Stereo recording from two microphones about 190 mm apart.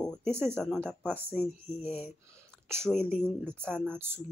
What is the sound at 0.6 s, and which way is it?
Speech, 5° left (ahead or behind).